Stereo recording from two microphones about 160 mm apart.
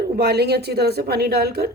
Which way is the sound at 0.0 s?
90° right.